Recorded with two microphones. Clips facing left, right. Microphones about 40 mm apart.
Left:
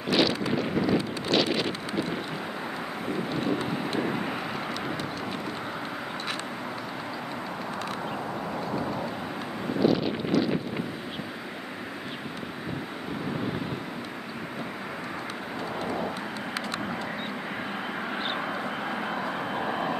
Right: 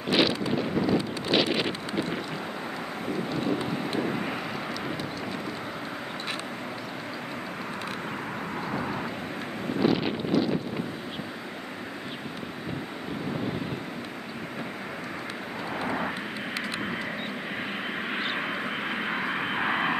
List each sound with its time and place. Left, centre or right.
0.1 s wind noise: centre
1.3 s a sound: centre
3.3 s vehicle: centre
9.8 s wind noise: centre
19.0 s vehicle: right